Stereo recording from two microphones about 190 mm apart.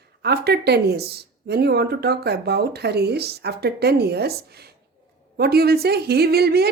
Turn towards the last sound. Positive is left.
turn(degrees=-55)  # may be behind; listen again after turning